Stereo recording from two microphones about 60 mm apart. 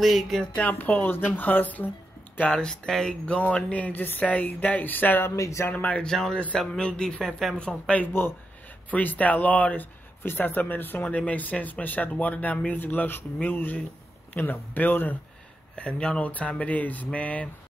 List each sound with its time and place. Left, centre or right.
0.0 s speech: centre
0.6 s speech: left
2.5 s speech: centre
3.3 s speech: left
5.3 s speech: left
5.7 s speech: left
6.0 s speech: centre
7.5 s speech: centre
15.7 s speech: centre